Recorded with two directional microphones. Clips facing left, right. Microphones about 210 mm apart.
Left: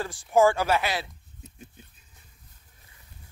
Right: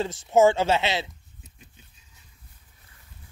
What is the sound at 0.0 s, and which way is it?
Speech, 25° right (ahead or behind).